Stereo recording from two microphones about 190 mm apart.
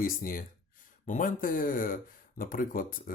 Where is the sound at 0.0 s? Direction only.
50° left (ahead or behind).